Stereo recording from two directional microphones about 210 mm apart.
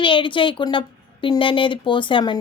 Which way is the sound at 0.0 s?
25° left (ahead or behind).